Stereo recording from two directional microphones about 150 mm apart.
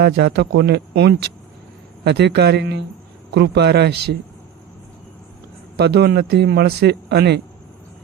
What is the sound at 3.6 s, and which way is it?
Speech, 90° right.